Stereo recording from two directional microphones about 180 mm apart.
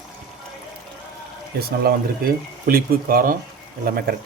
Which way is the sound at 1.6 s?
55° right (ahead or behind).